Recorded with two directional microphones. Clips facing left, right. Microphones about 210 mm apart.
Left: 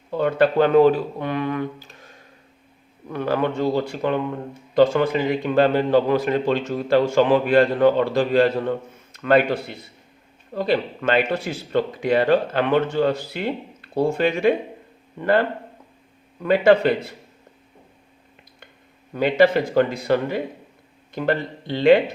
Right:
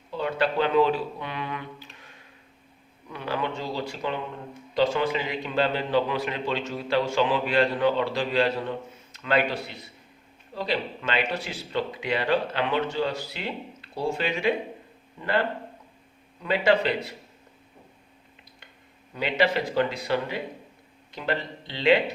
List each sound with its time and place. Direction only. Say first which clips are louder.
0.1 s a man's voice: left 8 dB; 50° left (ahead or behind)
19.1 s a man's voice: left 8 dB; 50° left (ahead or behind)